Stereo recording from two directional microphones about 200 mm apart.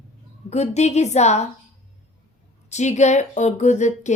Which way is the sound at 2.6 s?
35° left (ahead or behind).